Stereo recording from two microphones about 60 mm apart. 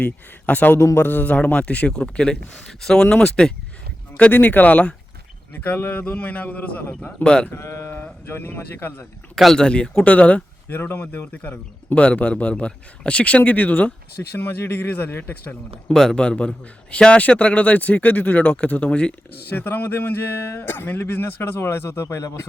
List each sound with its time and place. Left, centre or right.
0.0 s a man's voice: left
4.3 s a man's voice: left
7.3 s speech: centre
7.5 s speech: left
9.3 s speech: centre; by 10.8 s left
10.8 s a man's voice: left
14.3 s speech: left
15.9 s a man's voice: centre
19.5 s speech: left
22.0 s speech: left